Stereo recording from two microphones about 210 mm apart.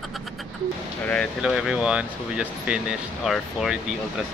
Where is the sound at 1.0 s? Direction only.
Centre (ahead or behind).